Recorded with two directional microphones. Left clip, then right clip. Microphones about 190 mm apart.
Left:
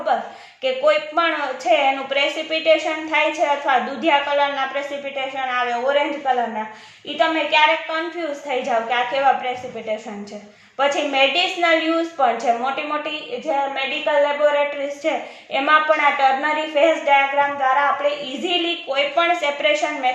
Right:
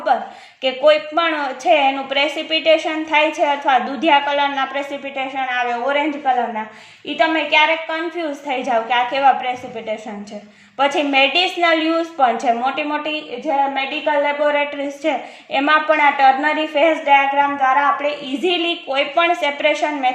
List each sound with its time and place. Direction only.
0.6 s a woman's voice: 35° right (ahead or behind)